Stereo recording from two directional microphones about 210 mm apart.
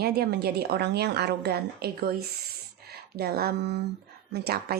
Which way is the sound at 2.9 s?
50° right (ahead or behind).